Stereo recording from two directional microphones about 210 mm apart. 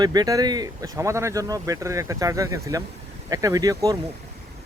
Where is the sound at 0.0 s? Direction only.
20° right (ahead or behind).